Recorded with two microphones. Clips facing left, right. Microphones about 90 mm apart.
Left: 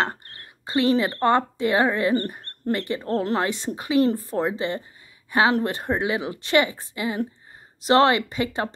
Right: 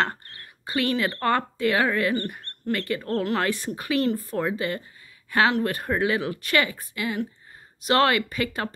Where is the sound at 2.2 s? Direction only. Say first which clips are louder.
Left 2 dB; 35° left (ahead or behind).